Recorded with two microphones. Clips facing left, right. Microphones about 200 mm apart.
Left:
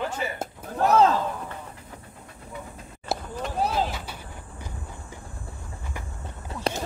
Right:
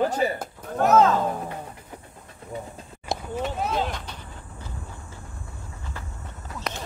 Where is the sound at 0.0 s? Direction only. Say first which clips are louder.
Right 7 dB; 40° right (ahead or behind).